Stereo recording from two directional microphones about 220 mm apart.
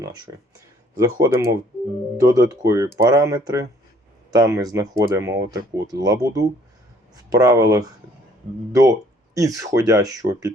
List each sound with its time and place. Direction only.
0.3 s speech: 20° right (ahead or behind)